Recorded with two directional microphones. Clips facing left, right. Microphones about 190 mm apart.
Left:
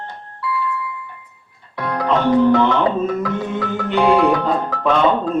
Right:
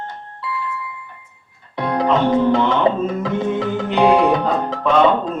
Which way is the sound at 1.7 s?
20° right (ahead or behind).